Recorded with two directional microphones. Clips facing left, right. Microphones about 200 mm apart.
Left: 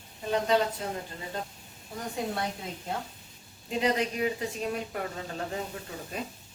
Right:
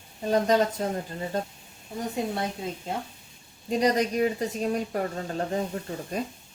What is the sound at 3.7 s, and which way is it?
A woman's voice, 40° right (ahead or behind).